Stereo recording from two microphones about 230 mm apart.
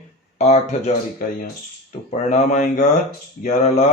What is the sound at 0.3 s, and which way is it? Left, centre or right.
Speech, left.